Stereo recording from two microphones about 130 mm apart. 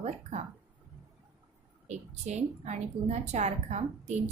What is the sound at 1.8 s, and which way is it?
A woman's voice, 60° right (ahead or behind).